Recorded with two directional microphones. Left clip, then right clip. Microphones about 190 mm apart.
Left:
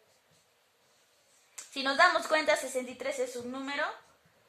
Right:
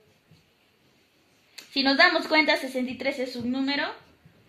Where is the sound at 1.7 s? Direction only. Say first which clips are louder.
Right 5 dB; 50° left (ahead or behind).